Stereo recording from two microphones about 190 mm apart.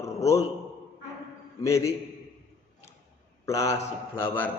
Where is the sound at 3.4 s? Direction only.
15° left (ahead or behind).